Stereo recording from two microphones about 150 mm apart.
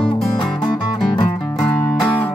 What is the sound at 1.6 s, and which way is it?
Music, 5° left (ahead or behind).